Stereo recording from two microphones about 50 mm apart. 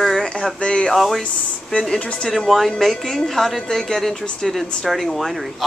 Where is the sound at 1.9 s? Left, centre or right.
Left.